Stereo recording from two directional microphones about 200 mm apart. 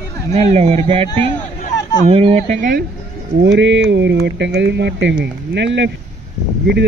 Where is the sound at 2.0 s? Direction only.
30° right (ahead or behind).